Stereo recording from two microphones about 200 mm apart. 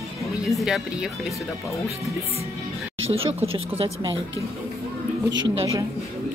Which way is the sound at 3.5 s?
25° right (ahead or behind).